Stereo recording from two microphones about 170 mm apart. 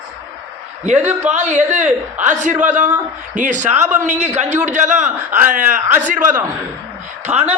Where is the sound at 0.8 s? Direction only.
45° right (ahead or behind).